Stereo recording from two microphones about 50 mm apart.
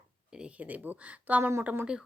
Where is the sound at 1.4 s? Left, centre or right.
Right.